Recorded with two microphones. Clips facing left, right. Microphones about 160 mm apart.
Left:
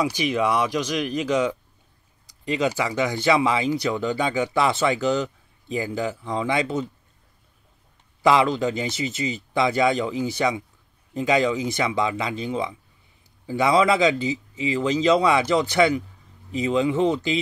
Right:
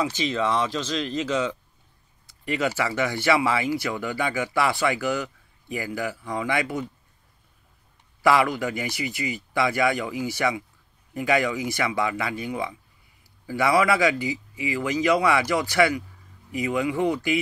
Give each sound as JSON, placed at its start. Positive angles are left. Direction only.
{"t": 0.0, "sound": "speech", "side_deg": 15}
{"t": 8.2, "sound": "speech", "side_deg": 20}